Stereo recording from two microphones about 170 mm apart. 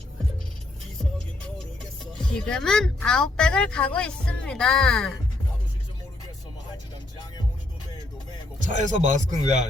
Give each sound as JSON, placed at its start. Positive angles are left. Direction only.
{"t": 2.1, "sound": "speech", "side_deg": 5}
{"t": 8.5, "sound": "speech", "side_deg": -50}